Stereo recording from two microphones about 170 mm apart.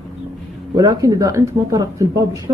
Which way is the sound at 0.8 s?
20° right (ahead or behind).